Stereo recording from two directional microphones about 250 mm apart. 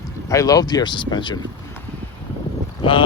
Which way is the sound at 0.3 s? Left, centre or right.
Centre.